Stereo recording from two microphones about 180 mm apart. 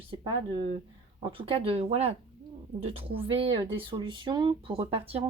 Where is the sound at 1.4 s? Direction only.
30° right (ahead or behind).